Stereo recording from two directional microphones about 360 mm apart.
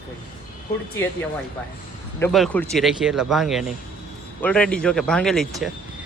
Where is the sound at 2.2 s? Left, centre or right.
Centre.